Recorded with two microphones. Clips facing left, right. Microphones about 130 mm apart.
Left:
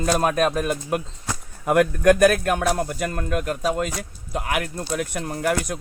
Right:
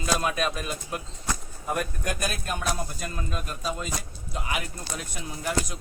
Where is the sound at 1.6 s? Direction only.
75° left (ahead or behind); by 5.8 s 60° left (ahead or behind).